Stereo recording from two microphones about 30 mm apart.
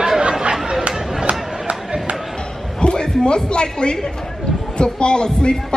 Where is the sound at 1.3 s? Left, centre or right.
Right.